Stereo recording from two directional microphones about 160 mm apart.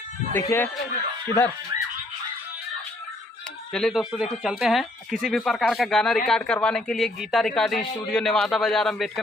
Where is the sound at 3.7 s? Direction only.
Centre (ahead or behind).